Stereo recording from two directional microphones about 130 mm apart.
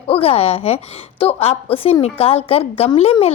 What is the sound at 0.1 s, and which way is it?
A woman's voice, 50° left (ahead or behind).